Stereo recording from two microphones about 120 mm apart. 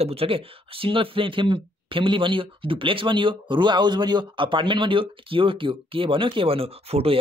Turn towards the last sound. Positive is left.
turn(degrees=-55)  # may be behind; listen again after turning